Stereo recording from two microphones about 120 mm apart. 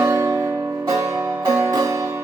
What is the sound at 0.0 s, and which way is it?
Music, 25° right (ahead or behind).